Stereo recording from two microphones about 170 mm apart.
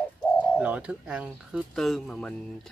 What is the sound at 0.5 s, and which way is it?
Speech, 5° right (ahead or behind).